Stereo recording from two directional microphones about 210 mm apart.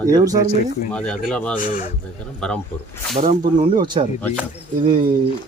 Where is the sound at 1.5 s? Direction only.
40° left (ahead or behind).